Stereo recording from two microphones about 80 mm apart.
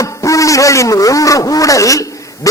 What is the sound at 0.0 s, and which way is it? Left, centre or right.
A man's voice, left.